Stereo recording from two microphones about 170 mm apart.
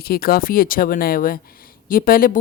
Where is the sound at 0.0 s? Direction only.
65° left (ahead or behind).